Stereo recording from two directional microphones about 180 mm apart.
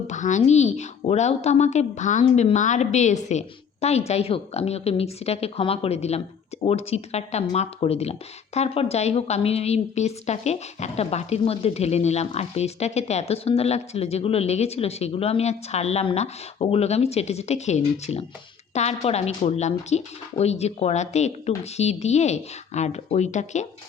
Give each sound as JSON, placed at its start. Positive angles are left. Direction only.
{"t": 0.1, "sound": "a woman's voice", "side_deg": 40}